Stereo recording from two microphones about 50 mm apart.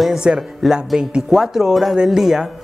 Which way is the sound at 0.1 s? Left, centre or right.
Centre.